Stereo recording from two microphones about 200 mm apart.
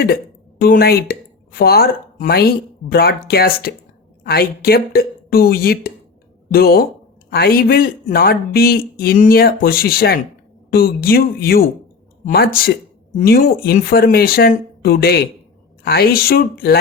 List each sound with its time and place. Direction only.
0.6 s speech: 50° left (ahead or behind)